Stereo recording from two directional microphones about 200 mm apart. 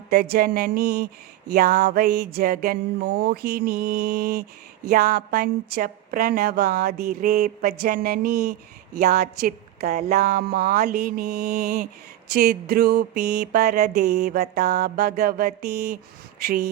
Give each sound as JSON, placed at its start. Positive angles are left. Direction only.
{"t": 0.1, "sound": "speech", "side_deg": -50}
{"t": 9.8, "sound": "speech", "side_deg": -35}
{"t": 10.1, "sound": "speech", "side_deg": -50}